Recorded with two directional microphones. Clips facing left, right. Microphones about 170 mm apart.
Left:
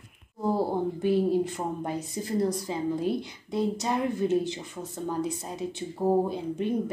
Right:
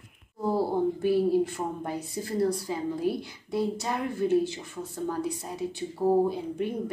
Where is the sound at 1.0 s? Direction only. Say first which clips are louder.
Left 1 dB; 20° left (ahead or behind).